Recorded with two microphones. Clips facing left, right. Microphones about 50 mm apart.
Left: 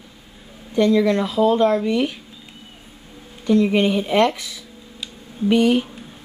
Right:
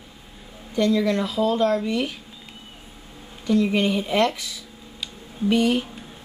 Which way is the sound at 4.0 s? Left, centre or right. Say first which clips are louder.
Left 4 dB; centre.